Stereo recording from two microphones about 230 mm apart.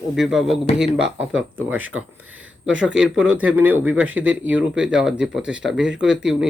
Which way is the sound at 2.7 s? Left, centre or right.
Centre.